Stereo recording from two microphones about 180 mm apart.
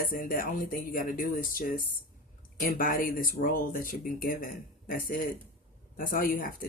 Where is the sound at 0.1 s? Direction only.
50° left (ahead or behind).